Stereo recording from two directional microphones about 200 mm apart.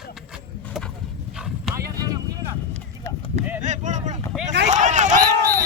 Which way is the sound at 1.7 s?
15° right (ahead or behind).